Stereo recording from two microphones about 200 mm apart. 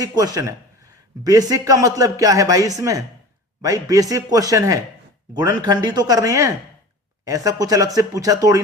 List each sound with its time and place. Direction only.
0.0 s speech: 20° right (ahead or behind)